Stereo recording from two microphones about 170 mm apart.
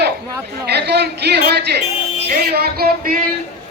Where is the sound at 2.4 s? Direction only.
70° right (ahead or behind).